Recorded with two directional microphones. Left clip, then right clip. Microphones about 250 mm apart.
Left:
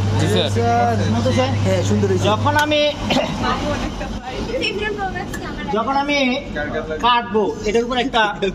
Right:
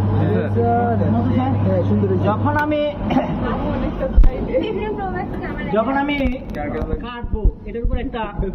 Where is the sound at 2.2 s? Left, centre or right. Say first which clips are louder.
Left 4 dB; left.